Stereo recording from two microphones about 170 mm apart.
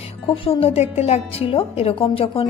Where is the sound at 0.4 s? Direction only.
35° left (ahead or behind).